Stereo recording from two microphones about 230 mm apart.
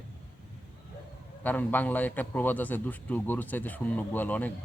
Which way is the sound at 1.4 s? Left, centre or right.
Centre.